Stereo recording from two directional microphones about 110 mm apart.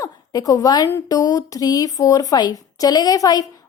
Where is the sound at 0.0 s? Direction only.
35° left (ahead or behind).